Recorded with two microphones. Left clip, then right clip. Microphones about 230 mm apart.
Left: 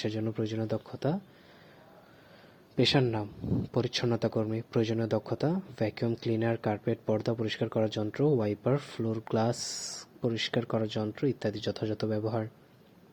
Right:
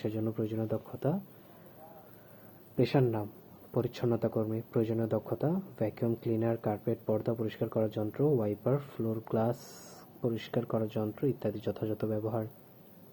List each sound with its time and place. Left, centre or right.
0.0 s speech: left
2.7 s speech: left